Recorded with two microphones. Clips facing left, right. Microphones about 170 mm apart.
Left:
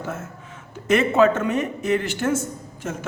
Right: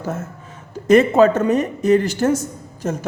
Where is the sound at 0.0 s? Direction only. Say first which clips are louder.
Right 4 dB; 40° right (ahead or behind).